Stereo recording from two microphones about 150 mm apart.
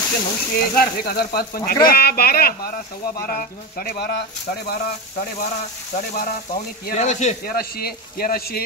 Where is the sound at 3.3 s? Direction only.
75° left (ahead or behind).